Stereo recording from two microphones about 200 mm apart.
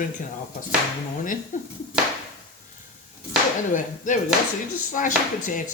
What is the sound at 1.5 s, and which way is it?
Speech, 40° left (ahead or behind).